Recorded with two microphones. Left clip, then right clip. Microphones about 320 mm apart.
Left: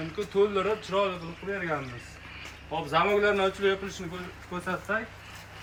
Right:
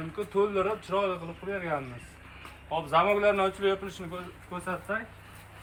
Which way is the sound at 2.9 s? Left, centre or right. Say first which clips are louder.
Even; centre.